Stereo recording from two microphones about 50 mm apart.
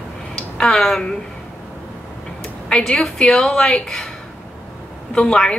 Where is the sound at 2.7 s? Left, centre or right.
Centre.